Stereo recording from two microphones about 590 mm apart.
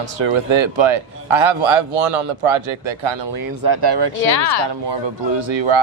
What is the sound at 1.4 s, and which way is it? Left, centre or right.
A man's voice, right.